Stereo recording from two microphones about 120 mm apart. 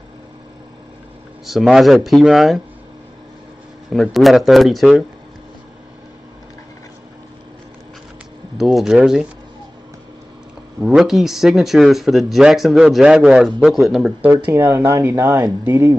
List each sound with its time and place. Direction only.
1.4 s speech: centre (ahead or behind)
3.9 s speech: centre (ahead or behind)
8.5 s speech: centre (ahead or behind)
11.0 s speech: centre (ahead or behind)
14.7 s speech: 25° right (ahead or behind)